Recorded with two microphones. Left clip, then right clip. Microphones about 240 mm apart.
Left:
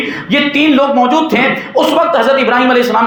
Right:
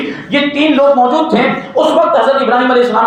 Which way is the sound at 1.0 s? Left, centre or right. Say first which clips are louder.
Even; left.